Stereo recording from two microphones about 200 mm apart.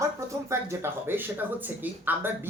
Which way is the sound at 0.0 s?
15° right (ahead or behind).